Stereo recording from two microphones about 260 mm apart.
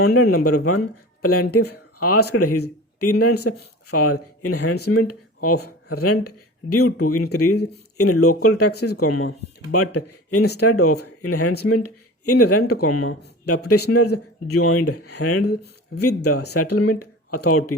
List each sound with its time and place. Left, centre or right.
0.2 s speech: left